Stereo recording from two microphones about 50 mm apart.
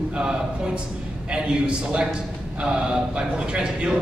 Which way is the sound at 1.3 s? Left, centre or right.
Centre.